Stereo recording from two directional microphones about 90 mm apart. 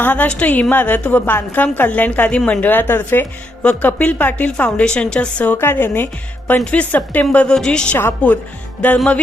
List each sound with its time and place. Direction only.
0.0 s a woman's voice: 20° left (ahead or behind)
7.9 s a woman's voice: 20° left (ahead or behind)